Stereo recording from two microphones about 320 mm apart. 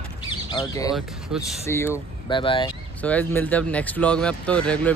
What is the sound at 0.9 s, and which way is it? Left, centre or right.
Speech, centre.